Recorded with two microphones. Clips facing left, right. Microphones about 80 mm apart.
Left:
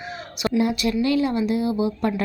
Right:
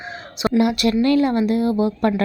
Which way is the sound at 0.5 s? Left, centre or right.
Right.